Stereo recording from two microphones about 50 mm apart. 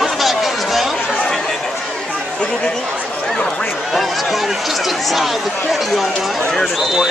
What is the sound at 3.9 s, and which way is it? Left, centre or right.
Speech, centre.